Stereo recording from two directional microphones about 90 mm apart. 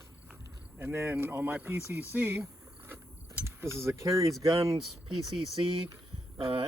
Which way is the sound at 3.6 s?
30° right (ahead or behind).